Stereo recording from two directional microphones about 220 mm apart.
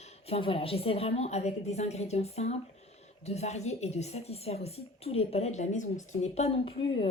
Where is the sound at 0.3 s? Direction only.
25° left (ahead or behind).